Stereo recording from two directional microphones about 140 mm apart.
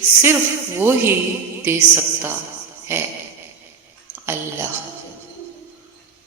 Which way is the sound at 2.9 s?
20° right (ahead or behind).